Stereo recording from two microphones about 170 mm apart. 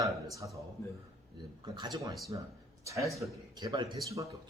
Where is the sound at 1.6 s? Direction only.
25° right (ahead or behind).